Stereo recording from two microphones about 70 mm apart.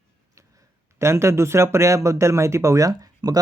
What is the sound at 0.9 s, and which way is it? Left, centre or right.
A man's voice, right.